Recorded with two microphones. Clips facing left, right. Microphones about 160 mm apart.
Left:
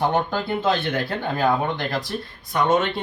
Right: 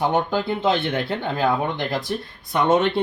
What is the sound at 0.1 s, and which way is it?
Speech, 20° right (ahead or behind).